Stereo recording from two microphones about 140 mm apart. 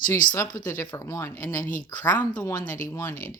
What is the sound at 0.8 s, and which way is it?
Speech, 25° left (ahead or behind).